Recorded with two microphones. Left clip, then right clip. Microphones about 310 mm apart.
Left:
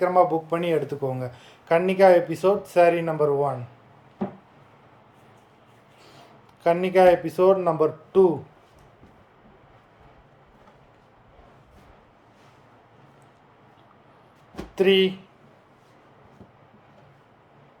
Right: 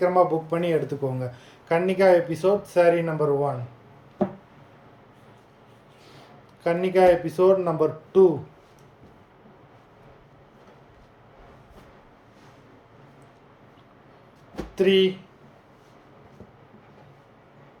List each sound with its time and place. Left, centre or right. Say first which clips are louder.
0.0 s speech: left 1 dB; centre
6.6 s speech: left 2 dB; centre
14.5 s a sound: left 1 dB; centre